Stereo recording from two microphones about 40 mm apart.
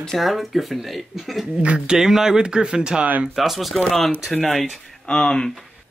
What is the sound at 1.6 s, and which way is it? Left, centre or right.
Speech, right.